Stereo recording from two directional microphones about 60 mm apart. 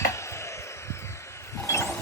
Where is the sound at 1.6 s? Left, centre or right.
Left.